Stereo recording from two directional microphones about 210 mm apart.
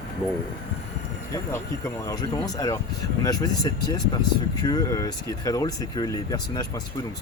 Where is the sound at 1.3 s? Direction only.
15° left (ahead or behind).